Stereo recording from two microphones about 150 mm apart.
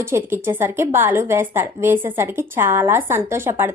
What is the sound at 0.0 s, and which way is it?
Speech, 15° right (ahead or behind).